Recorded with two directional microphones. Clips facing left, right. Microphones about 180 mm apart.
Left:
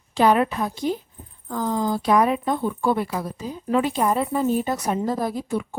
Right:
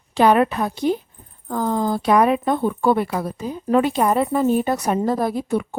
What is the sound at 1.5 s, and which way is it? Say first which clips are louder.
Speech: right 3 dB; 55° right (ahead or behind).